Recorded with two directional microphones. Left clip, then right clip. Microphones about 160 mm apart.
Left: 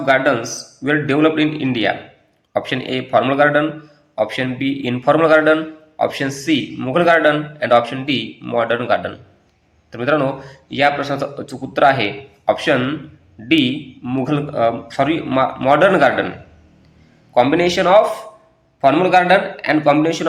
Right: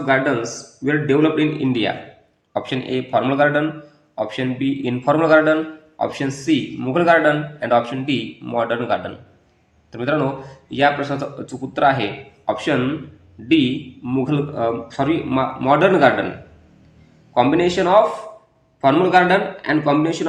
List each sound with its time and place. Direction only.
0.0 s a man's voice: 15° left (ahead or behind)
17.3 s a man's voice: 15° left (ahead or behind)